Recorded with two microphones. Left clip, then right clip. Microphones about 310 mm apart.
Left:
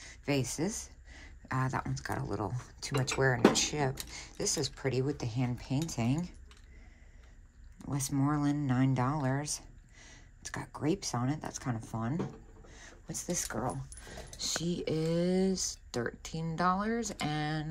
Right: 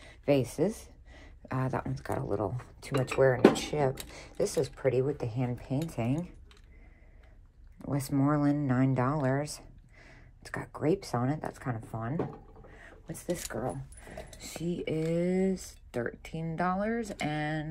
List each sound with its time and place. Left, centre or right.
0.0 s a sound: centre
0.6 s speech: centre
1.1 s a sound: centre
2.0 s speech: centre
4.5 s speech: left
8.1 s speech: centre
9.4 s speech: centre
14.6 s speech: centre